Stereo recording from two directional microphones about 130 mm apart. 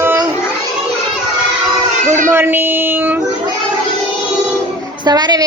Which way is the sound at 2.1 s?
20° right (ahead or behind).